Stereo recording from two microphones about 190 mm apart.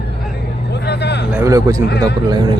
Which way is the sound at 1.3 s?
15° right (ahead or behind).